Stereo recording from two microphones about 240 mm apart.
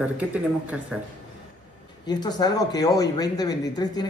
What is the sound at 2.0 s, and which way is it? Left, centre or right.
Speech, centre.